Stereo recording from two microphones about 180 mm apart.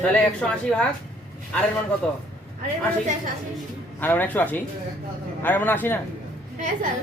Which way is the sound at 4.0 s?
10° left (ahead or behind).